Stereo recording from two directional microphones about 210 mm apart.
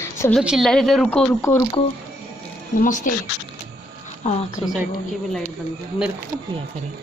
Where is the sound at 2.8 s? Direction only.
40° left (ahead or behind).